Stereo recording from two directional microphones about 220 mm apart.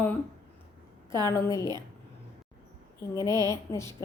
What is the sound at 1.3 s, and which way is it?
Speech, 15° left (ahead or behind).